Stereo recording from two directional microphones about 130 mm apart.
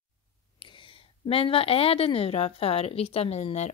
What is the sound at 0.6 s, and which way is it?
A woman's voice, 40° left (ahead or behind).